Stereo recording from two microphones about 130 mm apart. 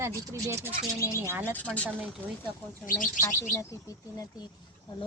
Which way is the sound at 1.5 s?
10° left (ahead or behind).